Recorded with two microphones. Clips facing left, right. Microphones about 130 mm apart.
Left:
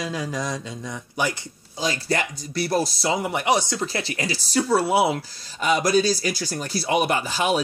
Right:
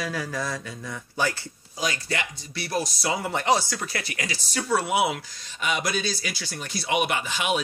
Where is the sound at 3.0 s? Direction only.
20° left (ahead or behind).